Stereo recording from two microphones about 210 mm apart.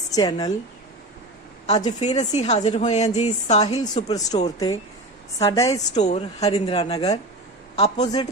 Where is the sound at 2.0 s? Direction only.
35° left (ahead or behind); by 5.8 s 15° left (ahead or behind).